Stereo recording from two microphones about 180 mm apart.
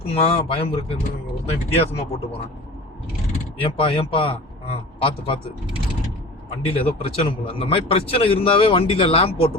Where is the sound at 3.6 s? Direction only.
30° left (ahead or behind).